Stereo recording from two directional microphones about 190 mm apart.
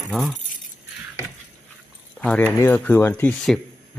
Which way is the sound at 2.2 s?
5° left (ahead or behind).